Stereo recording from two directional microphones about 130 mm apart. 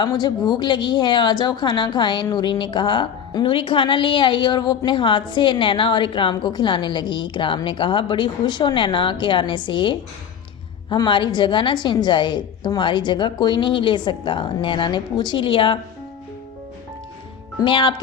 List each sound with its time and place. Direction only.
0.0 s a woman's voice: 30° left (ahead or behind)
17.6 s a woman's voice: 40° left (ahead or behind)